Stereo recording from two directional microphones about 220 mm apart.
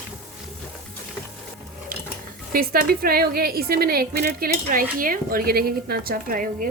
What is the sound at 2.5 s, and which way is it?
A woman's voice, 45° right (ahead or behind).